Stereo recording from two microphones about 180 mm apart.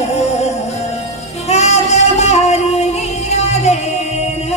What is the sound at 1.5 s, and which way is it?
Singing, 35° left (ahead or behind).